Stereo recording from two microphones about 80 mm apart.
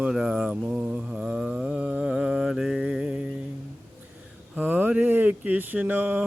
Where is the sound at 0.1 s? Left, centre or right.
Centre.